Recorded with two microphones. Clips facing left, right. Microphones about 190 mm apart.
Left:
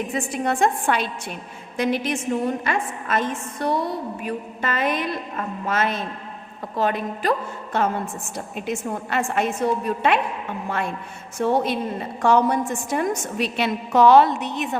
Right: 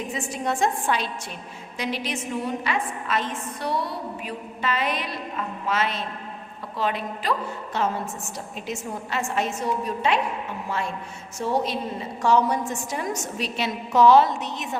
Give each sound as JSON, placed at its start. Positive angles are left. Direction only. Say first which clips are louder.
{"t": 0.1, "sound": "a woman's voice", "louder": "left 3 dB", "side_deg": 55}